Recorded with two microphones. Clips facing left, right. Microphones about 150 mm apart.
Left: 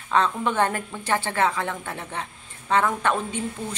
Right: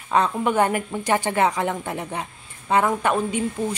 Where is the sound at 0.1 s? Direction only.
10° right (ahead or behind).